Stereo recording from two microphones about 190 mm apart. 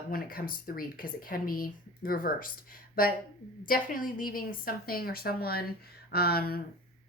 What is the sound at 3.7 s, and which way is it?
Speech, 45° left (ahead or behind).